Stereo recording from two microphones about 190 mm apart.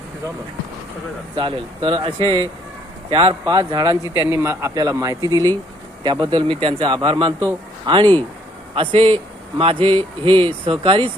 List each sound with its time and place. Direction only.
1.4 s a man's voice: 25° right (ahead or behind)